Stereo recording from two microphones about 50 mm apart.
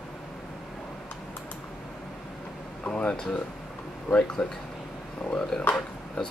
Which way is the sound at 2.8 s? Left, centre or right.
Left.